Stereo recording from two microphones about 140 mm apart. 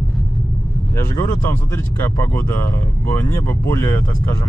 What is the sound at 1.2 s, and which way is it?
Speech, 15° left (ahead or behind).